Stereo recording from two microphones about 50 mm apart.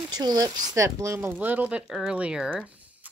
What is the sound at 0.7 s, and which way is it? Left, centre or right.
Speech, right.